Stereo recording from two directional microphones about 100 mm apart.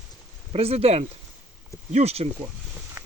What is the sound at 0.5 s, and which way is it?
Speech, 85° right.